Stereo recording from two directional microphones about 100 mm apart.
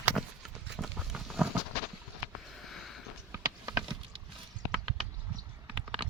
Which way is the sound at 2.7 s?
Centre (ahead or behind).